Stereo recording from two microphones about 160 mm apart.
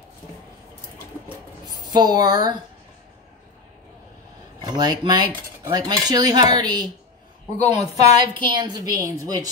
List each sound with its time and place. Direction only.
1.8 s speech: 25° right (ahead or behind)
4.6 s speech: 25° right (ahead or behind)
7.5 s a woman's voice: 40° left (ahead or behind)
8.4 s speech: 30° right (ahead or behind)